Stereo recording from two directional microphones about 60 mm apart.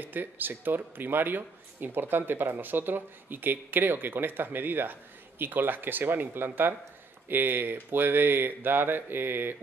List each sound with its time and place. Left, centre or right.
0.0 s speech: right